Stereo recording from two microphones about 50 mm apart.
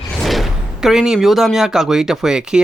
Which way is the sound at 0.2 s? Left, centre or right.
Centre.